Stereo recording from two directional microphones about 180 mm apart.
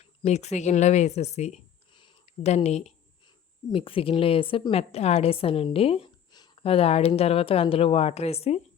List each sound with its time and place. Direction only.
0.0 s a woman's voice: 35° left (ahead or behind)